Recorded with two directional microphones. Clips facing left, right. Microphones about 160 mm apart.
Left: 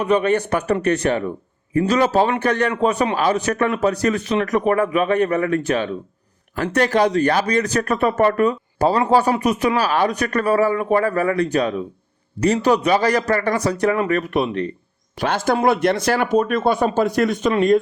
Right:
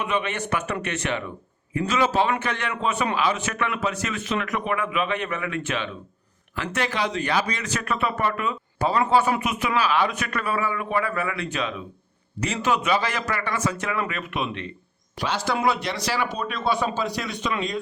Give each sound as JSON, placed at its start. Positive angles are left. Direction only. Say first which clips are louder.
{"t": 0.0, "sound": "speech", "louder": "left 9 dB", "side_deg": 40}
{"t": 15.2, "sound": "speech", "louder": "left 6 dB", "side_deg": 50}